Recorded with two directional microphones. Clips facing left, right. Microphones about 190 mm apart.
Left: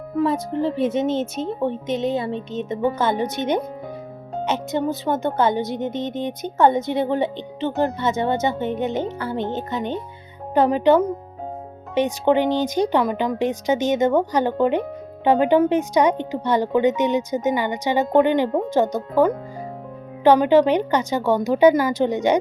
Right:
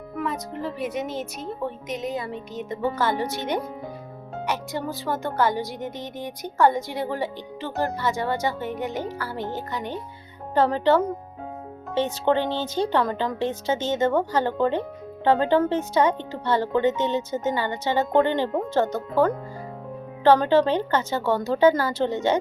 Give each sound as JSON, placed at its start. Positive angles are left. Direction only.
{"t": 0.2, "sound": "speech", "side_deg": 30}